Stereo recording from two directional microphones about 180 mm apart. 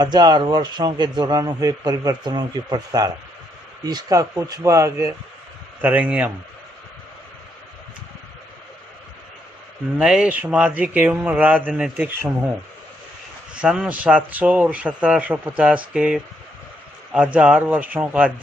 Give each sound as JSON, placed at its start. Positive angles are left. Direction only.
{"t": 0.0, "sound": "a man's voice", "side_deg": -25}
{"t": 10.0, "sound": "a man's voice", "side_deg": -5}
{"t": 13.6, "sound": "a man's voice", "side_deg": -5}